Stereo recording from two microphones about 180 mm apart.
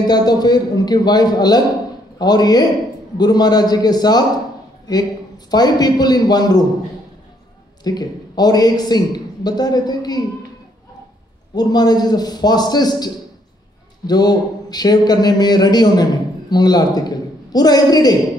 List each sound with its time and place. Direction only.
0.0 s a man's voice: 20° left (ahead or behind)
5.5 s a man's voice: 20° left (ahead or behind)
7.8 s a man's voice: 20° left (ahead or behind)
11.5 s a man's voice: 20° left (ahead or behind)